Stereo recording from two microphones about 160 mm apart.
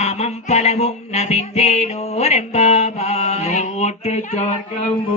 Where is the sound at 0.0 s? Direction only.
40° left (ahead or behind).